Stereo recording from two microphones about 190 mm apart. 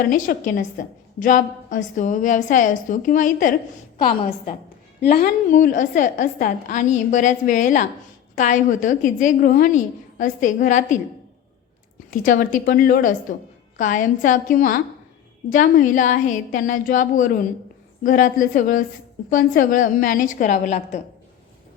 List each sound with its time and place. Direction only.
0.1 s a woman's voice: 45° left (ahead or behind)
12.2 s a woman's voice: 45° left (ahead or behind)